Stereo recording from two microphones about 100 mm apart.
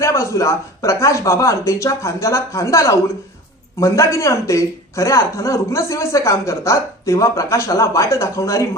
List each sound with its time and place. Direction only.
0.0 s speech: 30° left (ahead or behind)